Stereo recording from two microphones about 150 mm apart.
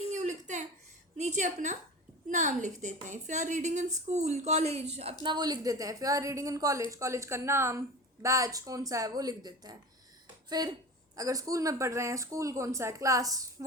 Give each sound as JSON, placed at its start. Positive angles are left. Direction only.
{"t": 0.1, "sound": "a sound", "side_deg": -55}
{"t": 1.1, "sound": "a woman's voice", "side_deg": -50}
{"t": 5.2, "sound": "a woman's voice", "side_deg": -30}